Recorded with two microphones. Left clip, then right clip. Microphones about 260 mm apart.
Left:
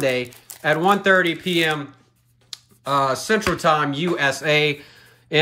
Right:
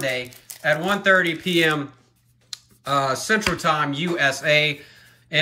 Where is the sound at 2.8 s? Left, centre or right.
Centre.